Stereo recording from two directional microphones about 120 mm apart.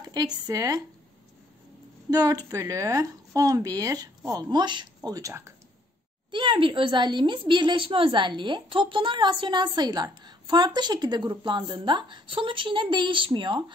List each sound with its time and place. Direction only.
0.0 s a woman's voice: 30° right (ahead or behind)
2.0 s a woman's voice: 30° right (ahead or behind)
6.3 s a woman's voice: 40° right (ahead or behind)